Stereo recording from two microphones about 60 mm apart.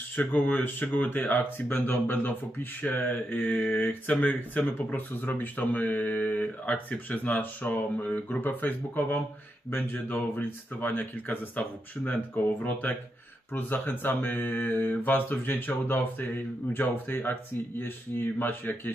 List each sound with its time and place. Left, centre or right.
0.1 s speech: left